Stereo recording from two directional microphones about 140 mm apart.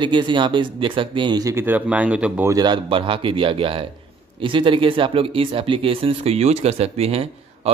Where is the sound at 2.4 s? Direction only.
30° right (ahead or behind).